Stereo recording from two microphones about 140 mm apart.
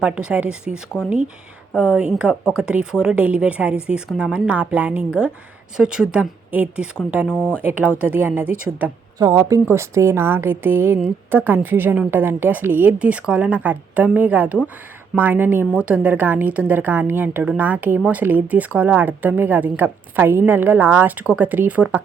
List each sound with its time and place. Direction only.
0.0 s a woman's voice: 5° right (ahead or behind)
2.3 s speech: 15° left (ahead or behind)
2.6 s a woman's voice: 5° right (ahead or behind)
9.1 s a woman's voice: 25° right (ahead or behind)